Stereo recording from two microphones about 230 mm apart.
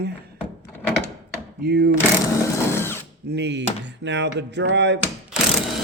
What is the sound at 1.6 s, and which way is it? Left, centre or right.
Speech, right.